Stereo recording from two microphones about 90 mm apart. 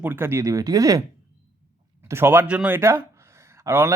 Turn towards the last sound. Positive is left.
turn(degrees=-30)  # may be behind; listen again after turning